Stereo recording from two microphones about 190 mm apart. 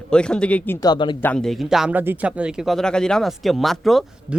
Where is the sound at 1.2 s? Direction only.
5° left (ahead or behind).